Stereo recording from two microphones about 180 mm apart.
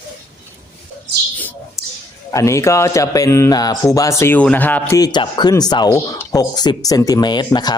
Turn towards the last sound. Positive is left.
turn(degrees=25)  # may be behind; listen again after turning